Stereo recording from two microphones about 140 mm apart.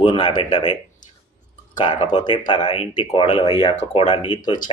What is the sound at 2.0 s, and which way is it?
Speech, 35° left (ahead or behind).